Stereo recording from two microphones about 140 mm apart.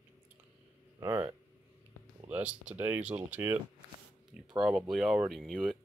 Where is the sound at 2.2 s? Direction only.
10° right (ahead or behind).